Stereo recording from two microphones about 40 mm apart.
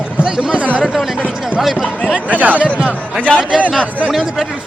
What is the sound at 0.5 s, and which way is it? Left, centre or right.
Speech, right.